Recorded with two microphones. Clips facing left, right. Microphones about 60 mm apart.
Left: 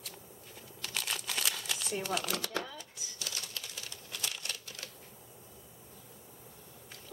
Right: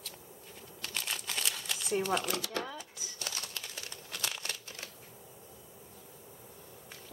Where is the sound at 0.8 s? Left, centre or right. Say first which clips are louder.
Left 1 dB; centre.